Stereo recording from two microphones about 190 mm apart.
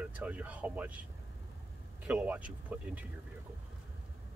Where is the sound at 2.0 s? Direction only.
5° right (ahead or behind).